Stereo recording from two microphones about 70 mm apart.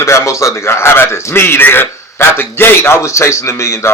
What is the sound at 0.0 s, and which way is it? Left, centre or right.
A man's voice, left.